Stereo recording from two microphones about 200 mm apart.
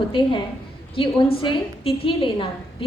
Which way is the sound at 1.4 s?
25° left (ahead or behind).